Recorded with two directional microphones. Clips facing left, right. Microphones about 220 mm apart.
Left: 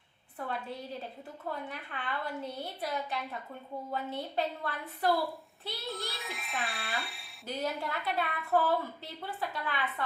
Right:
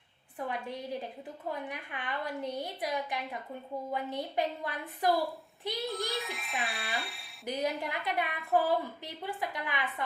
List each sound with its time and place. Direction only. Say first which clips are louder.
0.3 s a woman's voice: right 1 dB; 15° right (ahead or behind)
6.1 s speech: right 4 dB; centre (ahead or behind)
7.4 s a woman's voice: right 2 dB; 15° right (ahead or behind)